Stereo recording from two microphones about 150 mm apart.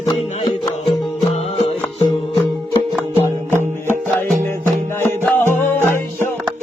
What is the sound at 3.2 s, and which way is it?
Music, 15° left (ahead or behind).